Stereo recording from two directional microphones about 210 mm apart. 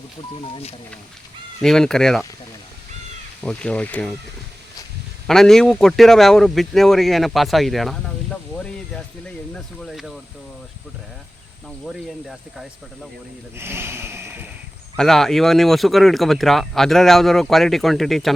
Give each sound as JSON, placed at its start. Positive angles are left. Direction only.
{"t": 0.5, "sound": "speech", "side_deg": 30}
{"t": 1.6, "sound": "a man's voice", "side_deg": 0}
{"t": 3.4, "sound": "a man's voice", "side_deg": 5}
{"t": 5.2, "sound": "a man's voice", "side_deg": 0}
{"t": 11.9, "sound": "a man's voice", "side_deg": 0}
{"t": 13.6, "sound": "a sound", "side_deg": -10}
{"t": 14.9, "sound": "a man's voice", "side_deg": 0}